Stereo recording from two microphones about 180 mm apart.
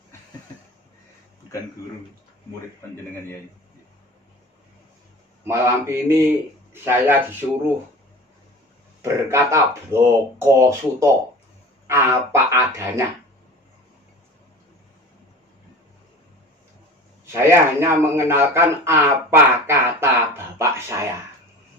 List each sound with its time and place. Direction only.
5.5 s a man's voice: 15° right (ahead or behind)
9.0 s a man's voice: 15° right (ahead or behind)
17.3 s a man's voice: 15° right (ahead or behind)